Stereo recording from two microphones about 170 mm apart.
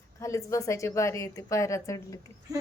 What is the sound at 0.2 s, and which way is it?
Speech, 20° left (ahead or behind).